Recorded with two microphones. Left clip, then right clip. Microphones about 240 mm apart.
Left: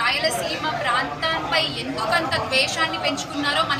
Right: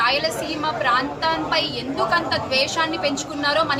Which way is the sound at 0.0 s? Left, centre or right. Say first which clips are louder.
Right 2 dB; right.